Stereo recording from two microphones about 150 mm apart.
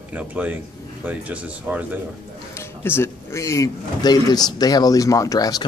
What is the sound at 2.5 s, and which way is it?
A man's voice, 15° left (ahead or behind).